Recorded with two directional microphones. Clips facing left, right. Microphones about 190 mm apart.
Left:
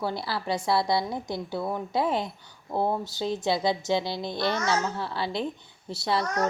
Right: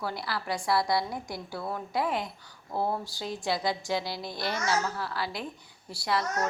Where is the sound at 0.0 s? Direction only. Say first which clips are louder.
Left 4 dB; 25° left (ahead or behind).